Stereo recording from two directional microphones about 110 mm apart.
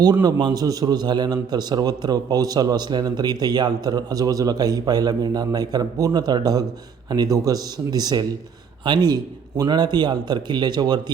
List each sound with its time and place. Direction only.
0.0 s a man's voice: 35° right (ahead or behind)